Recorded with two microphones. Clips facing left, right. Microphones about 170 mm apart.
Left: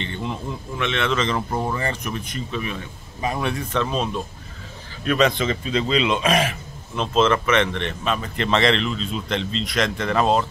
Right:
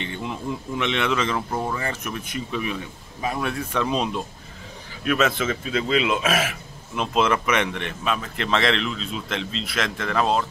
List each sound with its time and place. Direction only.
0.0 s speech: 5° right (ahead or behind)
0.7 s speech: 15° right (ahead or behind)
1.5 s speech: 10° left (ahead or behind)
1.8 s speech: 5° right (ahead or behind)
3.2 s speech: centre (ahead or behind)
3.8 s speech: 15° right (ahead or behind)
5.0 s speech: 5° right (ahead or behind)